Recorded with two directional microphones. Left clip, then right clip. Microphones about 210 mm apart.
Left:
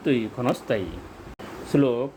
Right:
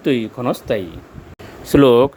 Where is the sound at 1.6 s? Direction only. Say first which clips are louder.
Right 12 dB; 35° right (ahead or behind).